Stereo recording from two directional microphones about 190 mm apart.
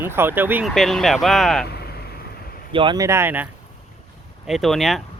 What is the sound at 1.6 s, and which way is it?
Vehicle, 55° left (ahead or behind).